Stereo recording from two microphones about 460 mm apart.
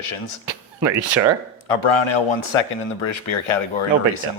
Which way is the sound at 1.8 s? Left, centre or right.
Left.